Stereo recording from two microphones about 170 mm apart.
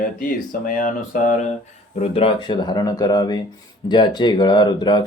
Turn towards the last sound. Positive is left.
turn(degrees=25)  # may be behind; listen again after turning